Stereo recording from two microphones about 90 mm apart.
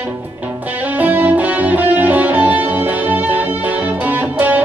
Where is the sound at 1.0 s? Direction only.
20° right (ahead or behind).